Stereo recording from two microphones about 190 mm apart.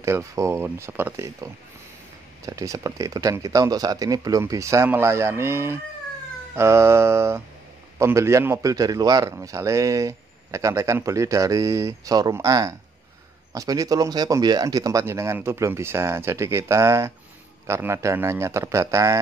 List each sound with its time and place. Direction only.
0.0 s a man's voice: 15° right (ahead or behind)